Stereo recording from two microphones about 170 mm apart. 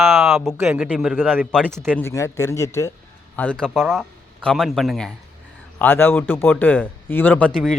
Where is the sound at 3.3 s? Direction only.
10° left (ahead or behind).